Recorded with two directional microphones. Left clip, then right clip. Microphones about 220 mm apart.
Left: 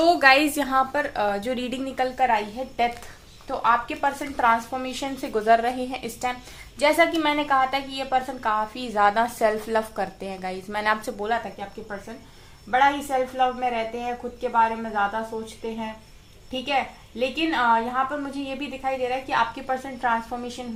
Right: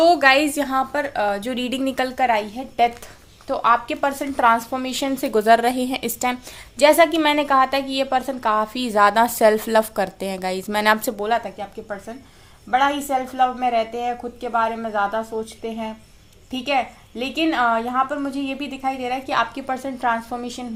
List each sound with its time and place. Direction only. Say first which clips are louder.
0.0 s a woman's voice: right 3 dB; 25° right (ahead or behind); by 11.4 s 50° right (ahead or behind)
12.7 s a woman's voice: right 1 dB; 50° right (ahead or behind)